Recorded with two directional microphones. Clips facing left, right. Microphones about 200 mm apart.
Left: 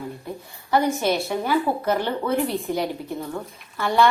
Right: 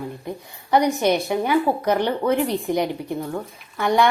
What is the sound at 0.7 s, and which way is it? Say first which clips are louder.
A woman's voice: right 3 dB; 15° right (ahead or behind).